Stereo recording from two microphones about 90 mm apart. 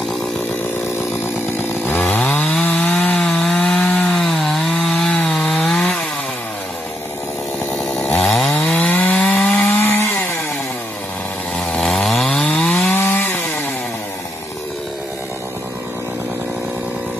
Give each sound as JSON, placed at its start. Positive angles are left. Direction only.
{"t": 1.6, "sound": "chainsaw", "side_deg": 30}
{"t": 2.0, "sound": "wood", "side_deg": 10}
{"t": 7.7, "sound": "chainsaw", "side_deg": 5}
{"t": 11.5, "sound": "chainsaw", "side_deg": 5}
{"t": 12.9, "sound": "wood", "side_deg": 20}